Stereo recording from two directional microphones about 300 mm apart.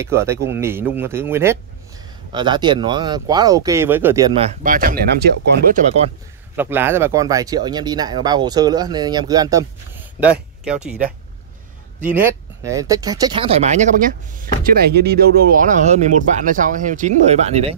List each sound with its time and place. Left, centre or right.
0.0 s speech: centre
4.4 s speech: right
6.5 s speech: centre
12.1 s speech: centre